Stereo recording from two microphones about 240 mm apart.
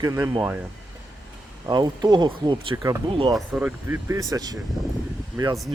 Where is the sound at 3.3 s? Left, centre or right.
Centre.